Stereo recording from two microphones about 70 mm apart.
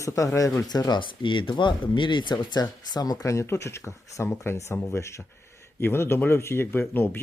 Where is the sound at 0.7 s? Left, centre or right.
Left.